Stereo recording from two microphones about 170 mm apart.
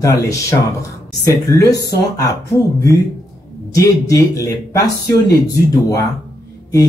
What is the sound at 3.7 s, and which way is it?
Speech, 20° left (ahead or behind).